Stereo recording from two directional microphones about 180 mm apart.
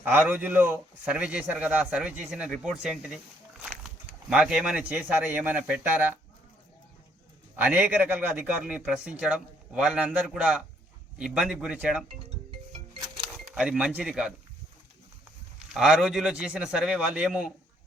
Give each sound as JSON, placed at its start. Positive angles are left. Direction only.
{"t": 0.0, "sound": "a man's voice", "side_deg": -10}
{"t": 7.5, "sound": "a man's voice", "side_deg": -10}
{"t": 13.3, "sound": "speech", "side_deg": -5}
{"t": 15.7, "sound": "a man's voice", "side_deg": 0}